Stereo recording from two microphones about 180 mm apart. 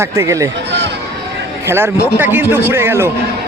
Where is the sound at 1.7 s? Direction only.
10° right (ahead or behind).